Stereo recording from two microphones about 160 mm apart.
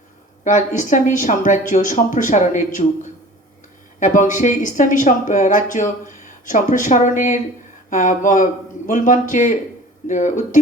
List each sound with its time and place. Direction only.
0.4 s speech: 50° left (ahead or behind)